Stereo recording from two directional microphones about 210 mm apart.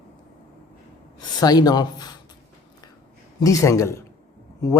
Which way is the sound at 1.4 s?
20° left (ahead or behind).